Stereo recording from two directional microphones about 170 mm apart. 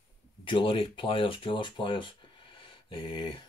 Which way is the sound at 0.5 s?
30° left (ahead or behind).